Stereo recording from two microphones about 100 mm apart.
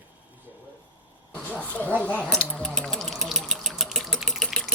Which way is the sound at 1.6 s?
15° left (ahead or behind).